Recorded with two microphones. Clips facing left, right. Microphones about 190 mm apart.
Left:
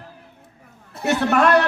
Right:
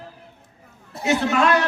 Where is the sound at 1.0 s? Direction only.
60° left (ahead or behind).